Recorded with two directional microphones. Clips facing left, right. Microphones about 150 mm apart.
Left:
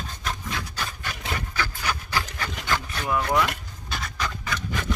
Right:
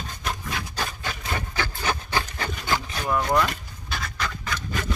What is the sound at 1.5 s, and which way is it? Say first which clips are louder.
Wood: right 3 dB; 25° right (ahead or behind).